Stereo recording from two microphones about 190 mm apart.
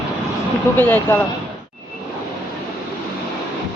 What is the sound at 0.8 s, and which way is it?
Speech, 10° left (ahead or behind).